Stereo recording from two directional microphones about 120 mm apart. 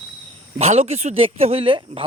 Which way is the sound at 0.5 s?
65° right (ahead or behind).